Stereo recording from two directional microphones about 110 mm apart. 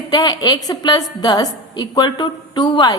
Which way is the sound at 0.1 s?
40° left (ahead or behind).